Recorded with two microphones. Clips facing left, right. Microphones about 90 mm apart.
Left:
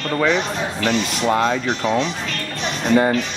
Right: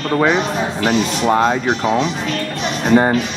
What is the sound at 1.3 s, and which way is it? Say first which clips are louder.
Speech: right 3 dB; 35° right (ahead or behind).